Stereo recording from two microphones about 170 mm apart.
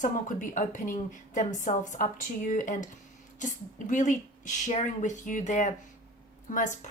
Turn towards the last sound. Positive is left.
turn(degrees=50)  # may be behind; listen again after turning